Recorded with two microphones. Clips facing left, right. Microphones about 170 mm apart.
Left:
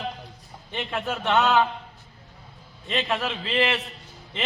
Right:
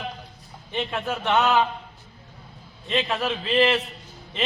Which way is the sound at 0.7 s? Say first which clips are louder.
Right 4 dB; 20° right (ahead or behind).